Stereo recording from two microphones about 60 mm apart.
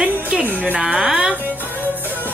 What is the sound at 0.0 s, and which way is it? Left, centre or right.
Music, right.